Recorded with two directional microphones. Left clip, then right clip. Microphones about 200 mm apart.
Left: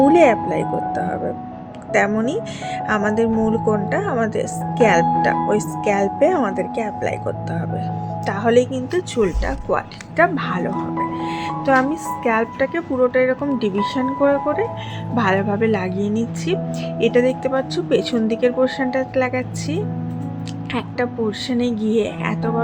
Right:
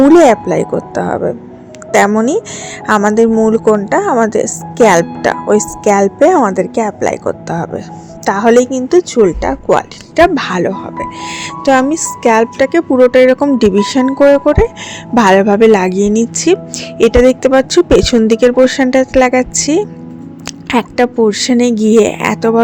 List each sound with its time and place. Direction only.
0.1 s speech: 35° right (ahead or behind)
10.3 s speech: 45° right (ahead or behind)
15.1 s speech: 50° right (ahead or behind)